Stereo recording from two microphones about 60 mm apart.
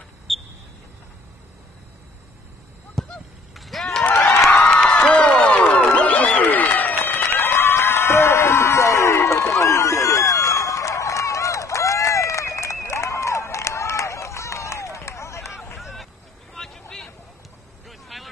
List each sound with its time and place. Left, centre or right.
0.3 s a sound: centre
3.0 s honk: centre
3.5 s run: centre
4.5 s a sound: centre; by 15.5 s left
15.8 s vehicle: centre
17.8 s vehicle: centre